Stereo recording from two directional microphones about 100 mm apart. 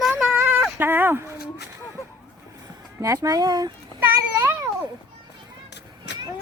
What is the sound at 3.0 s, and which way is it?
Speech, 35° right (ahead or behind).